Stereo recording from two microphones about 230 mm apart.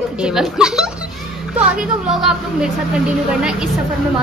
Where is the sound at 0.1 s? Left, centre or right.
Centre.